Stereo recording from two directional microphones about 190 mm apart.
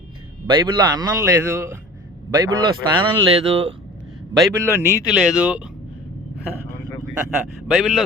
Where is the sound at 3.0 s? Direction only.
25° right (ahead or behind).